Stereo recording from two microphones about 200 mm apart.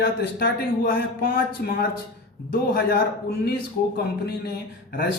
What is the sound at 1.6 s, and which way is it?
Speech, 50° left (ahead or behind).